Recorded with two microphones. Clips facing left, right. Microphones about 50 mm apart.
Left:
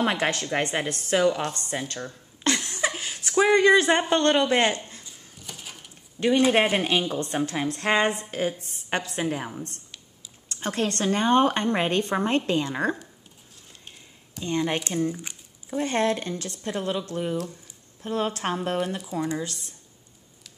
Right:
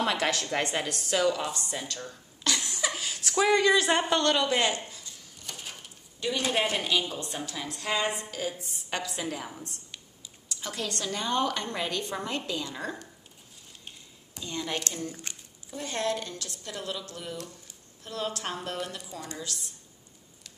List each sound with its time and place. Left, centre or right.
0.0 s a woman's voice: left
1.5 s a woman's voice: left
2.4 s a sound: left
3.3 s a woman's voice: left
5.4 s a sound: centre
6.1 s a woman's voice: left
10.5 s a woman's voice: left
14.4 s a woman's voice: left
14.8 s speech: centre
15.7 s a woman's voice: left; by 19.3 s centre
19.3 s a woman's voice: left